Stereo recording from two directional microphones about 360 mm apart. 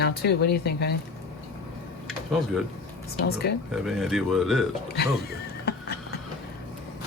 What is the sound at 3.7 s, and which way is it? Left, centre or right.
Speech, centre.